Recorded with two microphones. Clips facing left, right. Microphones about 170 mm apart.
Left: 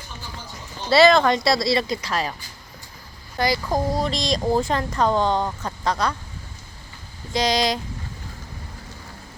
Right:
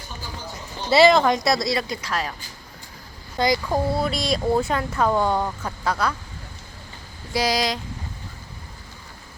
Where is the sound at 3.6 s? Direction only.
15° left (ahead or behind).